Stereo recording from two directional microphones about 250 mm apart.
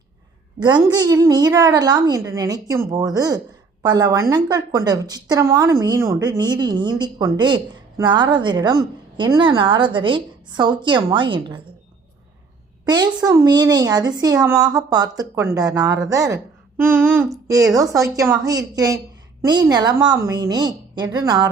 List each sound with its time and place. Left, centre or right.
0.6 s a woman's voice: centre
12.8 s a sound: centre
13.2 s a woman's voice: centre